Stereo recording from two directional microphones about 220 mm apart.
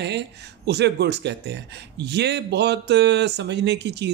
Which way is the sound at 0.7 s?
50° right (ahead or behind).